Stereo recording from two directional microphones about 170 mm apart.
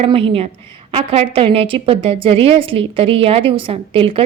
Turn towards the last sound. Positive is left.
turn(degrees=-30)  # may be behind; listen again after turning